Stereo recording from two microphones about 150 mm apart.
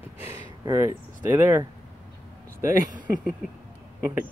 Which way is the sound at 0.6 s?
20° right (ahead or behind).